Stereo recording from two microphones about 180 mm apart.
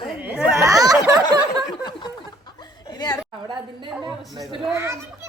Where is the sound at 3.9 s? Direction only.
Centre (ahead or behind).